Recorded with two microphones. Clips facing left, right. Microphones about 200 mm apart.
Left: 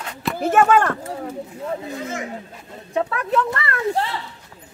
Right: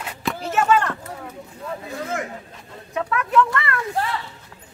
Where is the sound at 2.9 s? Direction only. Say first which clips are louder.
Left 2 dB; 30° left (ahead or behind).